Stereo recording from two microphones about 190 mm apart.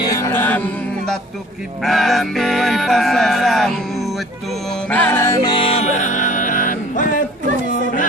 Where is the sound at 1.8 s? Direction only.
Centre (ahead or behind).